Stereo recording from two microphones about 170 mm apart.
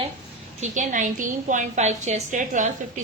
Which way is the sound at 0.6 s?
50° right (ahead or behind).